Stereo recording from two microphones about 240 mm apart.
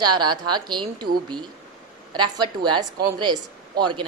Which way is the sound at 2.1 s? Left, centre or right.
Centre.